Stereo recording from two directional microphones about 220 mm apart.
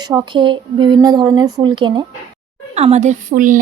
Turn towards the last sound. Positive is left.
turn(degrees=-35)  # may be behind; listen again after turning